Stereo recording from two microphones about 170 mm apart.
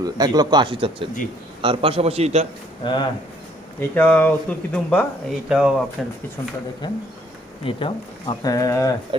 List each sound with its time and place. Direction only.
0.0 s a man's voice: 20° right (ahead or behind); by 2.5 s 40° right (ahead or behind)
2.8 s speech: 25° left (ahead or behind)
3.8 s speech: 10° left (ahead or behind)
5.5 s speech: 5° right (ahead or behind)
7.6 s speech: 30° left (ahead or behind)